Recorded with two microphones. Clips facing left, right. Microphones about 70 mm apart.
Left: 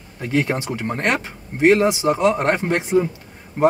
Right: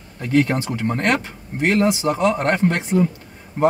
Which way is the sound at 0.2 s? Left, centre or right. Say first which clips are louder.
Right 3 dB; centre.